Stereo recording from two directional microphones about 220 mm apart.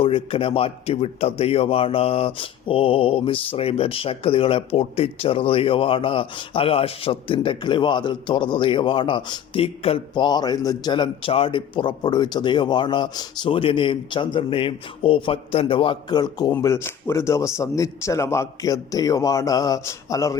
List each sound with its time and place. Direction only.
0.0 s a man's voice: 25° left (ahead or behind)